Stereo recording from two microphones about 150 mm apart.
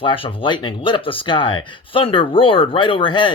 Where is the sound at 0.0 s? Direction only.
35° left (ahead or behind).